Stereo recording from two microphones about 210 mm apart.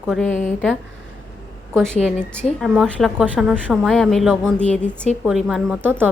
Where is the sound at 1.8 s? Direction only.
5° left (ahead or behind).